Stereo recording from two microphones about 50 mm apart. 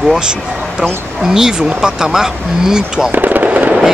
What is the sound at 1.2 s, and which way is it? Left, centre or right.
Speech, centre.